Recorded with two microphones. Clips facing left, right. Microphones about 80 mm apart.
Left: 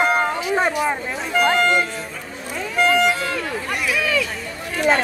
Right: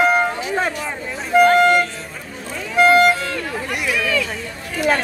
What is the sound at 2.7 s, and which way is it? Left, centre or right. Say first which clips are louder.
Run: right 5 dB; right.